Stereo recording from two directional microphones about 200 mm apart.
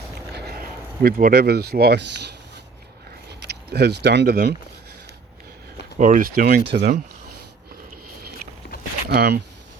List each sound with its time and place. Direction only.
0.3 s speech: 50° right (ahead or behind)
6.0 s speech: 40° right (ahead or behind)
9.0 s speech: 55° right (ahead or behind)